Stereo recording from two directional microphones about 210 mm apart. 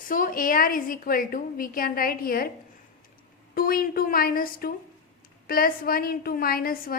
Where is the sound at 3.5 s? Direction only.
45° left (ahead or behind).